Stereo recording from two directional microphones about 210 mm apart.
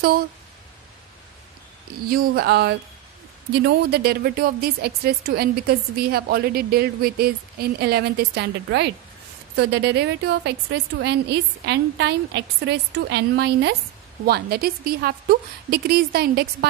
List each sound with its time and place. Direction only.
2.0 s a woman's voice: 45° right (ahead or behind)